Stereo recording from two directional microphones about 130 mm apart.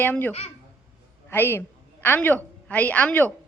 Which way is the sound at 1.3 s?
15° left (ahead or behind).